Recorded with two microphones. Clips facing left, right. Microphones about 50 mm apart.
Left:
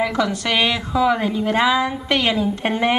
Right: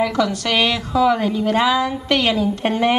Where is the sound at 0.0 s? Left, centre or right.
Centre.